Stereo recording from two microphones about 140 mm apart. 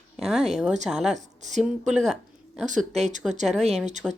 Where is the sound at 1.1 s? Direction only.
55° right (ahead or behind).